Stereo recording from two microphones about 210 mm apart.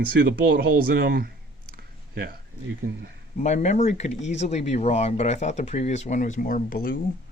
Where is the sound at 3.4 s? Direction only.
35° left (ahead or behind).